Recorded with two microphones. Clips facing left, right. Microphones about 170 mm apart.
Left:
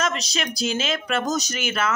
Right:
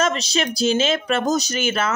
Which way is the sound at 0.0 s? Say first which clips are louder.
Right 5 dB; 30° right (ahead or behind).